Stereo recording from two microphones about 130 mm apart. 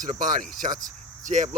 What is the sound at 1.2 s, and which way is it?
Speech, 70° right (ahead or behind).